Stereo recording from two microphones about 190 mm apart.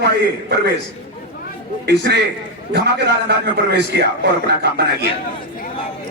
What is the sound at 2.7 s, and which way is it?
A man's voice, 60° right (ahead or behind).